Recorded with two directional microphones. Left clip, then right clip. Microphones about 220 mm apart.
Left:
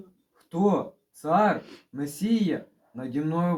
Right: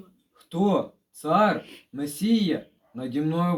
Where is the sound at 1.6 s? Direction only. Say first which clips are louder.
Right 1 dB; 20° left (ahead or behind).